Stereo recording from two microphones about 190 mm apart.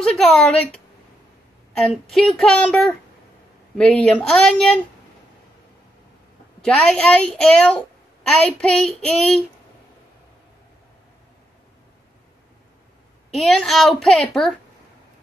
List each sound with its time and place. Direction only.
0.0 s a child's voice: 5° left (ahead or behind)
1.8 s a child's voice: centre (ahead or behind)
6.6 s a child's voice: 5° left (ahead or behind)
13.3 s a child's voice: centre (ahead or behind)